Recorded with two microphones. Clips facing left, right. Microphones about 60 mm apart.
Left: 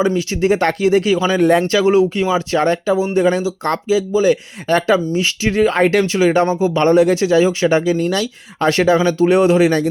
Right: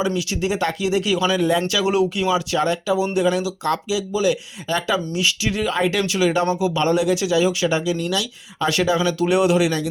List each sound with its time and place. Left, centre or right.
0.2 s speech: left